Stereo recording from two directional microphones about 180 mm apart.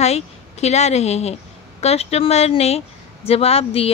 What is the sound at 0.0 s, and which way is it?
A woman's voice, 35° left (ahead or behind).